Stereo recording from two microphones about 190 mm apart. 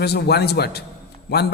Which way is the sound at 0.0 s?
60° left (ahead or behind).